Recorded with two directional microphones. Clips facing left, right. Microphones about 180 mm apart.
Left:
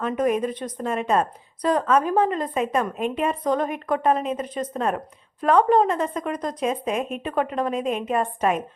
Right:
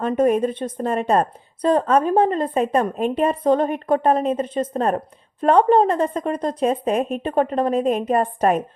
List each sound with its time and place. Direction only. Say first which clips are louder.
0.0 s a woman's voice: right 4 dB; 30° right (ahead or behind)